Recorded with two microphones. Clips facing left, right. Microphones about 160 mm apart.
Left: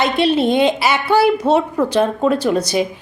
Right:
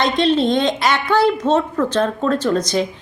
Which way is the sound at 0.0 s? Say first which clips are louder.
Left 1 dB; 10° left (ahead or behind).